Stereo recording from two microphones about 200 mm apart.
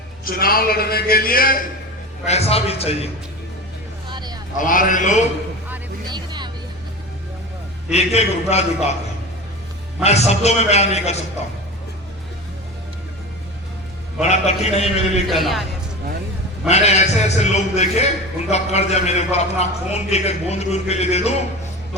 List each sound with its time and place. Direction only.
0.3 s a man's voice: 45° left (ahead or behind)
2.2 s a man's voice: 30° left (ahead or behind)
4.1 s sheep: 20° right (ahead or behind)
4.5 s a man's voice: 40° left (ahead or behind)
6.1 s music: 20° right (ahead or behind)
7.9 s a man's voice: 30° left (ahead or behind)
10.0 s a man's voice: 35° left (ahead or behind)
14.2 s a man's voice: 35° left (ahead or behind)
15.3 s a man's voice: centre (ahead or behind)
16.6 s a man's voice: 35° left (ahead or behind)